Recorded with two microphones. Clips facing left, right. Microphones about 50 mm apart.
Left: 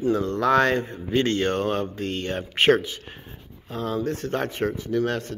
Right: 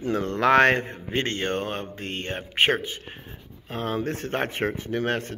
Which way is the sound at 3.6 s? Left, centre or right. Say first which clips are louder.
Left 1 dB; right.